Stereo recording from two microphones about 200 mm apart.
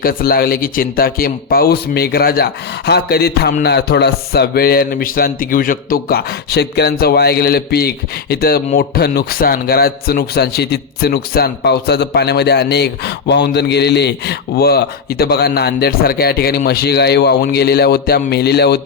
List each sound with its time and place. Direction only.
0.0 s a man's voice: 45° left (ahead or behind)